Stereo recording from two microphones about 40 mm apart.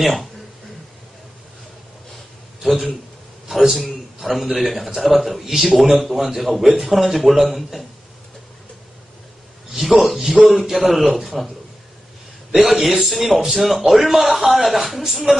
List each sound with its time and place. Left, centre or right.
0.0 s speech: centre
2.6 s a man's voice: centre
10.0 s a man's voice: centre
10.3 s a man's voice: centre
10.6 s a man's voice: centre
12.5 s a man's voice: centre